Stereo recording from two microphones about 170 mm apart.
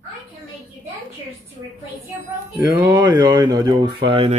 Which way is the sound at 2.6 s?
15° right (ahead or behind).